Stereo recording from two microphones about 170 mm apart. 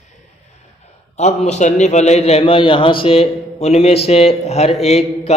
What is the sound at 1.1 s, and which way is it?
A man's voice, 40° left (ahead or behind).